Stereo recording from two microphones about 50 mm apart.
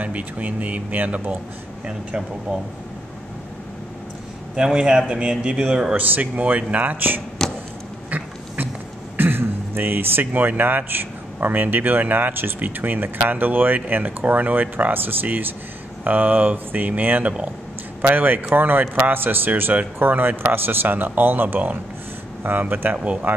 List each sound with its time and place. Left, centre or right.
0.0 s a man's voice: right
4.6 s a man's voice: centre
5.9 s a man's voice: right
7.4 s a sound: centre
9.1 s throat clearing: right
10.6 s a man's voice: right